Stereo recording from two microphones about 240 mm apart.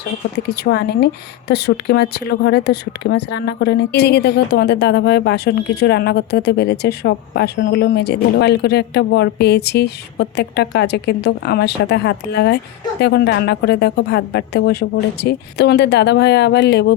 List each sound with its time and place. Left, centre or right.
0.3 s speech: left